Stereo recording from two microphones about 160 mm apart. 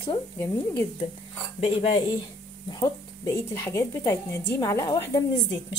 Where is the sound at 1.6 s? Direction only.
40° left (ahead or behind).